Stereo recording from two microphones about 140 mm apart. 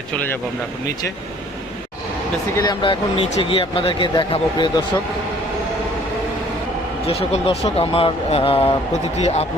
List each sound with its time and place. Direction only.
2.6 s speech: 35° left (ahead or behind)
7.1 s speech: 45° left (ahead or behind)